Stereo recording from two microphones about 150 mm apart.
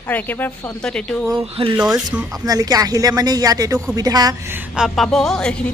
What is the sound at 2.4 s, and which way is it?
Speech, 25° right (ahead or behind).